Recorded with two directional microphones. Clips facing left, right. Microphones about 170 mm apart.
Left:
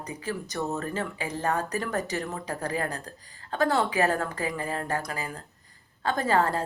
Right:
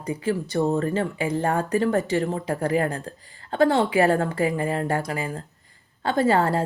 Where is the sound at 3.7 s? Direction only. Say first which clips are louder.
Right 5 dB; 30° right (ahead or behind).